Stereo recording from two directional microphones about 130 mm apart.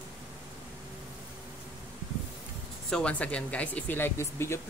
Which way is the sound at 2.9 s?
10° left (ahead or behind).